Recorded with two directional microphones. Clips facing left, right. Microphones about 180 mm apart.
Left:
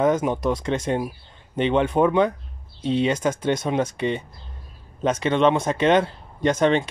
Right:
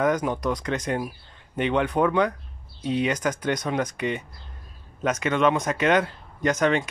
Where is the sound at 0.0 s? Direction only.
25° left (ahead or behind).